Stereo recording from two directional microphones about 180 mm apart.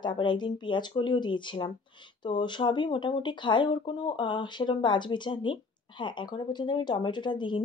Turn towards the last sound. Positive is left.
turn(degrees=25)  # may be behind; listen again after turning